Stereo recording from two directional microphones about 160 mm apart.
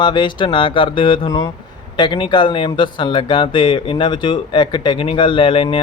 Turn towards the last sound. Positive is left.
turn(degrees=35)  # may be behind; listen again after turning